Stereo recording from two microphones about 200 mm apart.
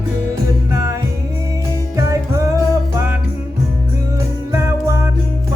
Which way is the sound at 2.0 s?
15° right (ahead or behind).